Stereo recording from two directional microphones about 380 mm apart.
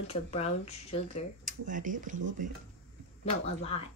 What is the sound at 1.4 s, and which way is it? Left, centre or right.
Speech, centre.